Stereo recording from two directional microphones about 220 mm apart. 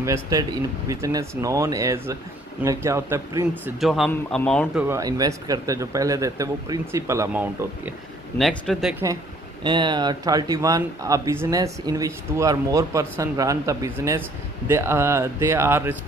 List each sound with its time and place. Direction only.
0.0 s speech: 15° right (ahead or behind)
3.8 s speech: centre (ahead or behind)
4.7 s speech: 10° right (ahead or behind)
8.4 s speech: centre (ahead or behind)
9.0 s speech: 20° right (ahead or behind)